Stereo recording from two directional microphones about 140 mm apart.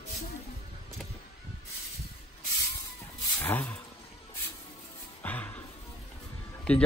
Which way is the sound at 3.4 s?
15° left (ahead or behind).